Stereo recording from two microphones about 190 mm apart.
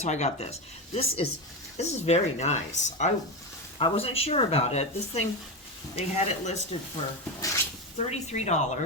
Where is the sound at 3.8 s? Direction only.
30° left (ahead or behind).